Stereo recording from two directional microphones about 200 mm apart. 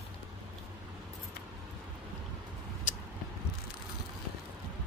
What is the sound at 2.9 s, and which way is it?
Vehicle, 40° left (ahead or behind).